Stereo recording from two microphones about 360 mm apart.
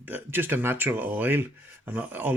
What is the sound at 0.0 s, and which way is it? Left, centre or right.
Speech, centre.